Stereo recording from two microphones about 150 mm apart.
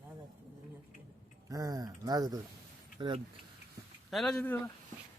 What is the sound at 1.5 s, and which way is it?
Speech, 25° right (ahead or behind).